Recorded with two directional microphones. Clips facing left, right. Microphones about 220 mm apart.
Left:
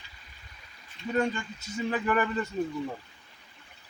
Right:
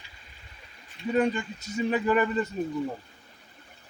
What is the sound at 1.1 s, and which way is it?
A man's voice, 15° right (ahead or behind).